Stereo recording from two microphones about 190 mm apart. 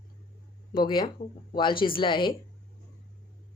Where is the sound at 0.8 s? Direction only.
25° left (ahead or behind).